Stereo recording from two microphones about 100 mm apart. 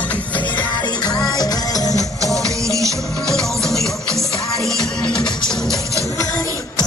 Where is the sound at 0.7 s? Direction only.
45° left (ahead or behind).